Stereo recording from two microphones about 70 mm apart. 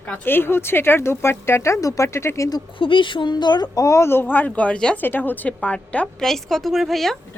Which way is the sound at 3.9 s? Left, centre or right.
Left.